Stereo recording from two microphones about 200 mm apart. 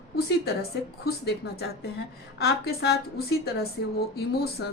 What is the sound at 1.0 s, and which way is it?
A woman's voice, 50° left (ahead or behind).